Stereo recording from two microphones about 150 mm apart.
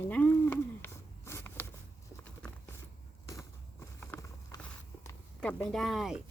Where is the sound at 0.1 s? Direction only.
10° left (ahead or behind).